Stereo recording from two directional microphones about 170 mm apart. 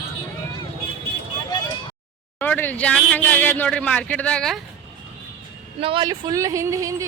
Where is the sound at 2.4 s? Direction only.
10° left (ahead or behind).